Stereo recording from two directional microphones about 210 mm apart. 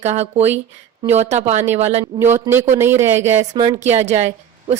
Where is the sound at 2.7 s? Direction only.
10° right (ahead or behind).